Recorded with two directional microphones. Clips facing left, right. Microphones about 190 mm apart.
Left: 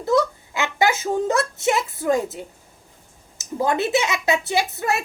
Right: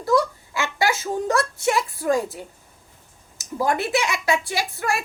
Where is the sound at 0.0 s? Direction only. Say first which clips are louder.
Left 1 dB; 20° left (ahead or behind).